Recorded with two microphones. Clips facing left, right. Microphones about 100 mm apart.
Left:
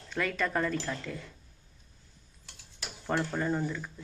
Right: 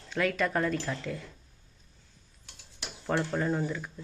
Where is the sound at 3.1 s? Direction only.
Centre (ahead or behind).